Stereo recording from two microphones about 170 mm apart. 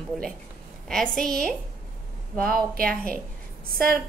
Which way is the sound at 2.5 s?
60° right (ahead or behind).